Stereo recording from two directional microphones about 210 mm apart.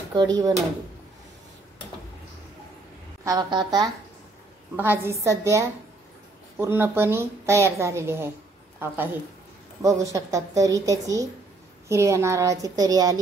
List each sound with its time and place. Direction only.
0.1 s a woman's voice: 20° right (ahead or behind)
3.3 s a woman's voice: 20° right (ahead or behind)